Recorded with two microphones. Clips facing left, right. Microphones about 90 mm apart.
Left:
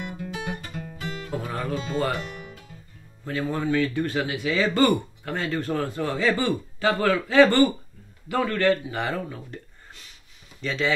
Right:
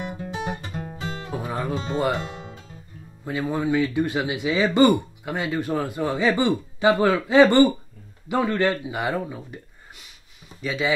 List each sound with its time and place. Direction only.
0.0 s guitar: 25° right (ahead or behind)
3.3 s speech: 15° right (ahead or behind)